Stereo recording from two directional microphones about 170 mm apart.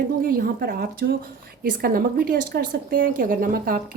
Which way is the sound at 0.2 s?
55° right (ahead or behind).